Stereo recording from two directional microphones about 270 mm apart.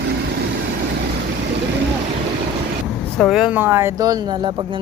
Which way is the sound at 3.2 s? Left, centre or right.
Centre.